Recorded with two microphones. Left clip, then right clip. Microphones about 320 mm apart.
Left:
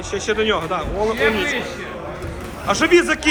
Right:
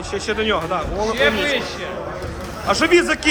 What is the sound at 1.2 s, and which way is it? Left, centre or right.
Speech, right.